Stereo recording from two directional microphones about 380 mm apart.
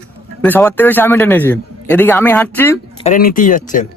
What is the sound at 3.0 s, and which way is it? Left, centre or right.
Speech, left.